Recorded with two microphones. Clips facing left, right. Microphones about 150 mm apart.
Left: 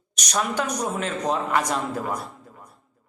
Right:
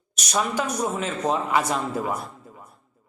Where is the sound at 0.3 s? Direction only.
5° right (ahead or behind).